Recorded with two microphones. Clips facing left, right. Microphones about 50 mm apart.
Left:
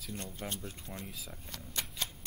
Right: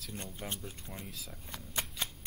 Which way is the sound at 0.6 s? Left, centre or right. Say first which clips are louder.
Left 1 dB; centre.